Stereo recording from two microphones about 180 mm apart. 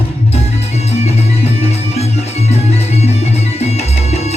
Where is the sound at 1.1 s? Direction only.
35° left (ahead or behind).